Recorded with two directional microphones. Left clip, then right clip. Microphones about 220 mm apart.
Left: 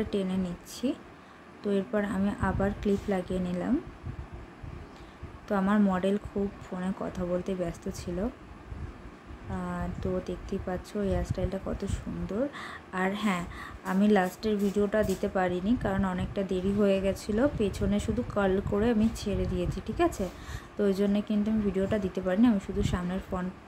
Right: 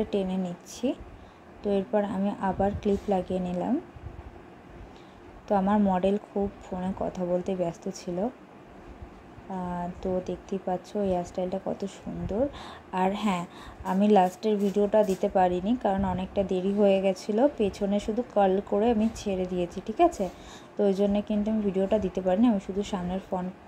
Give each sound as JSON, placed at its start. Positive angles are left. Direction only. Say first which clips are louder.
{"t": 0.0, "sound": "a woman's voice", "louder": "right 3 dB", "side_deg": -5}
{"t": 5.5, "sound": "a woman's voice", "louder": "right 3 dB", "side_deg": 0}
{"t": 9.9, "sound": "a woman's voice", "louder": "right 3 dB", "side_deg": 0}